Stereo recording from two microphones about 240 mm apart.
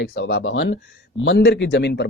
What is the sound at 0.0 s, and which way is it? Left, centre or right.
Speech, left.